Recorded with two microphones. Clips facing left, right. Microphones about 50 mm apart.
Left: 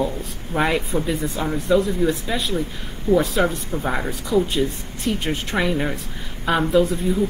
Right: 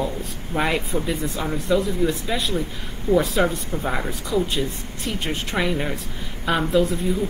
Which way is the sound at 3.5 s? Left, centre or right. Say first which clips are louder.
Left 1 dB; centre.